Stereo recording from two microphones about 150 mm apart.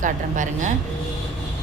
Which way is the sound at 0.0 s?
60° right (ahead or behind).